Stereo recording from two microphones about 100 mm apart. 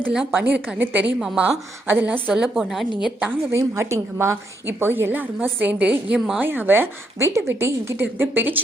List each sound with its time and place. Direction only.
0.1 s a woman's voice: 5° right (ahead or behind)
1.9 s a woman's voice: 20° right (ahead or behind)
2.6 s a woman's voice: centre (ahead or behind)
3.0 s a woman's voice: 15° right (ahead or behind)
3.5 s a woman's voice: 30° right (ahead or behind); by 6.4 s 10° right (ahead or behind)
6.4 s a woman's voice: 20° right (ahead or behind)